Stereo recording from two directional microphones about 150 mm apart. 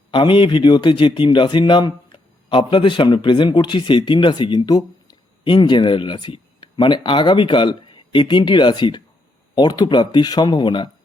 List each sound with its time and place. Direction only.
0.1 s a man's voice: 35° left (ahead or behind)